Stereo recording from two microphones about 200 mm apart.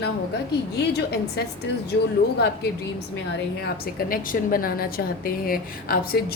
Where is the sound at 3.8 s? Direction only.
45° left (ahead or behind).